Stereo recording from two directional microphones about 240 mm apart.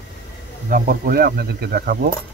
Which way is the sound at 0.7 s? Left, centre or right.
Right.